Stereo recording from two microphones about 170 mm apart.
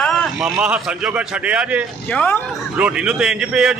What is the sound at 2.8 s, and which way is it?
Speech, 5° right (ahead or behind).